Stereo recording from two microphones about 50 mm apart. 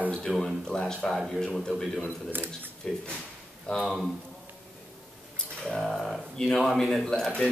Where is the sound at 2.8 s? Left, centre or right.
Centre.